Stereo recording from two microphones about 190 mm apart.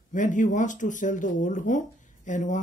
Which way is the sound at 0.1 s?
45° left (ahead or behind).